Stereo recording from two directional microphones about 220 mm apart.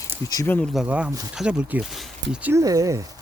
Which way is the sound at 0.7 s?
5° right (ahead or behind).